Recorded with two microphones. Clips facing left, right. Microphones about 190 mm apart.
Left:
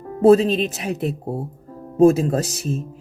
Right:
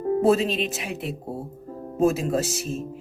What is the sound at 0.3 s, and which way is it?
Speech, 40° left (ahead or behind).